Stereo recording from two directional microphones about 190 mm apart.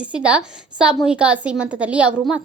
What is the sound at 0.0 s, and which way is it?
A woman's voice, 5° right (ahead or behind).